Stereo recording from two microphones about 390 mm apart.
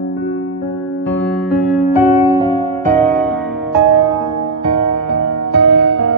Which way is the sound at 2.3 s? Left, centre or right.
Centre.